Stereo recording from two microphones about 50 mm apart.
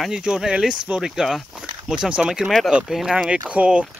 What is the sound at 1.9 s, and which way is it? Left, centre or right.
Speech, centre.